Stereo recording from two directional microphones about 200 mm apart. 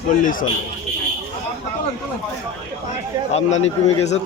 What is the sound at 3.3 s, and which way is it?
Speech, 35° left (ahead or behind).